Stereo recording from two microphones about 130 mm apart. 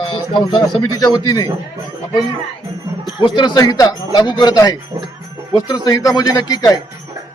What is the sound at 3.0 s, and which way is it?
Speech, 35° left (ahead or behind).